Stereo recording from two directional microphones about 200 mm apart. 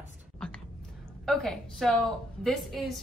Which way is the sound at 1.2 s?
Centre (ahead or behind).